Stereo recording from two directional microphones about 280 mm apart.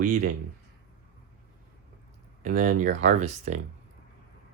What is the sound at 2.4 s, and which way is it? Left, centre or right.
Speech, right.